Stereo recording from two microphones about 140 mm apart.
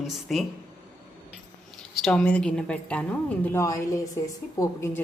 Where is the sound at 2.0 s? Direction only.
5° left (ahead or behind).